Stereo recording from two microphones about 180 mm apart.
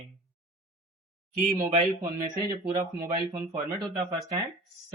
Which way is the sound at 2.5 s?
15° right (ahead or behind).